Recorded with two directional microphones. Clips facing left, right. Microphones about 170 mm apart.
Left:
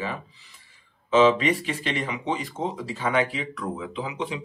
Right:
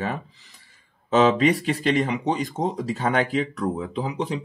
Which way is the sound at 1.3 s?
35° right (ahead or behind).